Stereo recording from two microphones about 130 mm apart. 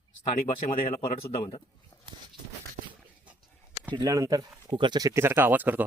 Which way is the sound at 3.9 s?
30° right (ahead or behind).